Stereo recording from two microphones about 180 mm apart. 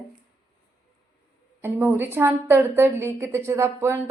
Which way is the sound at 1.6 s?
10° right (ahead or behind).